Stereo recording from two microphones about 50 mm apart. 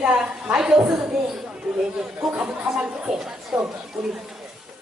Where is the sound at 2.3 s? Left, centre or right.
Right.